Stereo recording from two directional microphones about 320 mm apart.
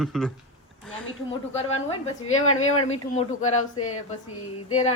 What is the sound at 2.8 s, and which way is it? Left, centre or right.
Speech, left.